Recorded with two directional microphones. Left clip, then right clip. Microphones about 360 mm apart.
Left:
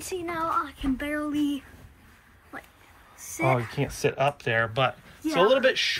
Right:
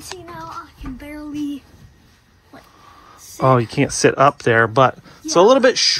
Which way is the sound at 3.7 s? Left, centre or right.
Right.